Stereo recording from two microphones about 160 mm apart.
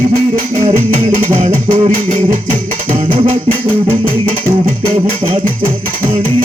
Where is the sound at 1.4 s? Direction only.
40° right (ahead or behind).